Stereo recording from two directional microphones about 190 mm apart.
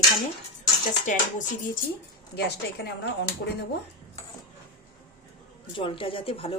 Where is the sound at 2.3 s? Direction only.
60° left (ahead or behind).